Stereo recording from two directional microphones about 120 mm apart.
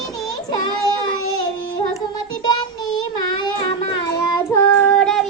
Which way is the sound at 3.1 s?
35° left (ahead or behind).